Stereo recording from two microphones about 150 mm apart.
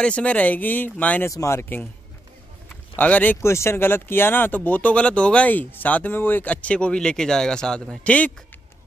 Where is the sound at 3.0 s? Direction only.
10° left (ahead or behind).